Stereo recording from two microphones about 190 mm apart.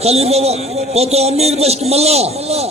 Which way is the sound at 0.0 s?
35° right (ahead or behind).